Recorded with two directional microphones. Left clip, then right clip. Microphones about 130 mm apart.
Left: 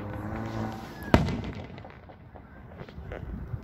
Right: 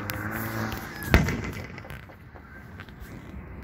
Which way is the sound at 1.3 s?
30° left (ahead or behind).